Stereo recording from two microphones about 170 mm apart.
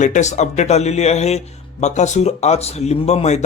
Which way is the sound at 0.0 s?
45° left (ahead or behind).